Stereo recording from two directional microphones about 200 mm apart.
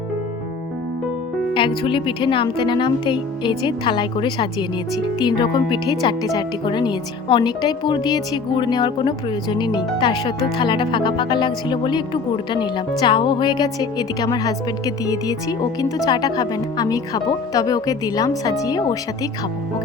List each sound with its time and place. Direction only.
1.5 s speech: 25° left (ahead or behind)